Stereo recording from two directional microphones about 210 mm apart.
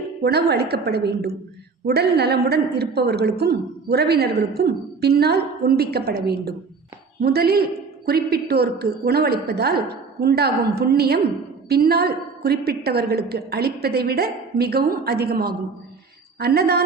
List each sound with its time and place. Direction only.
0.2 s a woman's voice: 50° right (ahead or behind)